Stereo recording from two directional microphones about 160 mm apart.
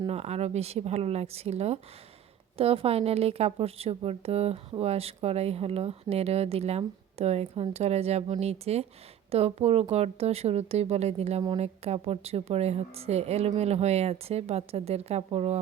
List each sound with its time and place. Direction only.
0.1 s a woman's voice: 40° right (ahead or behind)